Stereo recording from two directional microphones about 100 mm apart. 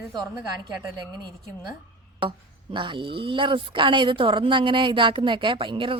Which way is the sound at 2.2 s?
50° right (ahead or behind).